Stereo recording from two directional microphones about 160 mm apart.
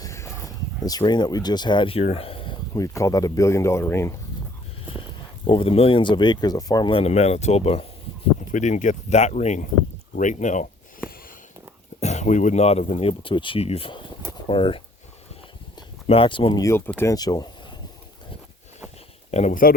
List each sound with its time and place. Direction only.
0.0 s a sound: 20° left (ahead or behind)
2.7 s speech: 20° left (ahead or behind)
5.5 s speech: 35° left (ahead or behind)
8.4 s speech: 50° left (ahead or behind)
11.9 s speech: 45° left (ahead or behind)
16.0 s speech: 35° left (ahead or behind)
16.6 s speech: 15° left (ahead or behind)
19.3 s speech: 45° left (ahead or behind)